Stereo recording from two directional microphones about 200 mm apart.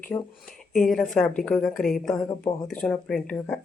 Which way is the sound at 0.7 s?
Centre (ahead or behind).